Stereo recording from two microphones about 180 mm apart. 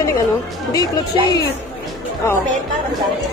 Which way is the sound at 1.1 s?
25° right (ahead or behind).